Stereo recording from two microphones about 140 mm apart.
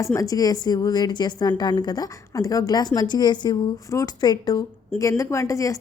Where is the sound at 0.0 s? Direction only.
20° left (ahead or behind).